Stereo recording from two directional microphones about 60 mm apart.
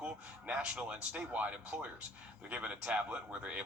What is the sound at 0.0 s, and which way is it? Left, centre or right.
Speech, centre.